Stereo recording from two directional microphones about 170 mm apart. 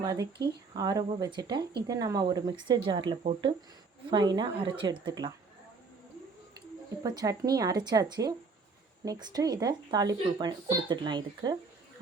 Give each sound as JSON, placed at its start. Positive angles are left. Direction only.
{"t": 0.0, "sound": "speech", "side_deg": -20}
{"t": 7.0, "sound": "speech", "side_deg": -20}